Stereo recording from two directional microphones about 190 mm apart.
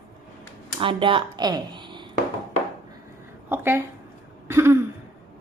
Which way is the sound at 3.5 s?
10° right (ahead or behind).